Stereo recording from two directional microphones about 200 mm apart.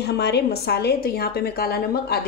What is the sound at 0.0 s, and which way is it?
A woman's voice, 55° left (ahead or behind).